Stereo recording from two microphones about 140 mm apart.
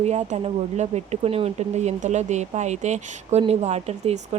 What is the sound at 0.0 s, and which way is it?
A woman's voice, 50° right (ahead or behind).